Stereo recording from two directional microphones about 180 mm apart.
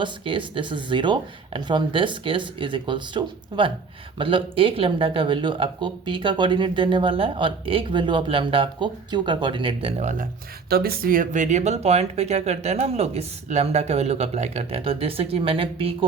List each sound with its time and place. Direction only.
0.0 s speech: 30° right (ahead or behind)
10.7 s speech: 60° right (ahead or behind); by 16.0 s 30° right (ahead or behind)